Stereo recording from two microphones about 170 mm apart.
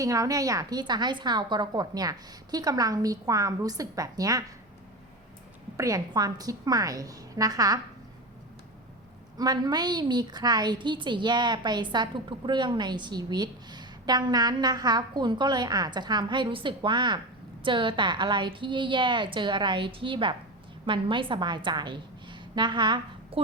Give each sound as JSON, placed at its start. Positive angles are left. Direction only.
{"t": 0.0, "sound": "a woman's voice", "side_deg": -20}
{"t": 5.7, "sound": "a woman's voice", "side_deg": -20}
{"t": 9.4, "sound": "a woman's voice", "side_deg": -25}